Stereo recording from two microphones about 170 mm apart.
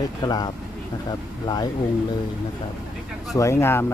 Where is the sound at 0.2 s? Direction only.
25° left (ahead or behind).